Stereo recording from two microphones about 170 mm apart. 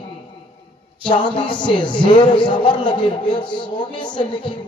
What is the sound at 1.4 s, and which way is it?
A man's voice, 30° left (ahead or behind).